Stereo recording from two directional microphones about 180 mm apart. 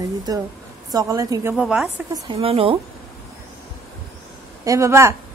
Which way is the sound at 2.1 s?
30° right (ahead or behind).